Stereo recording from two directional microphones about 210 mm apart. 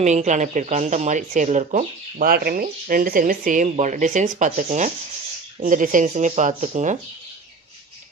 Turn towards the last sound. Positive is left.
turn(degrees=-35)  # may be behind; listen again after turning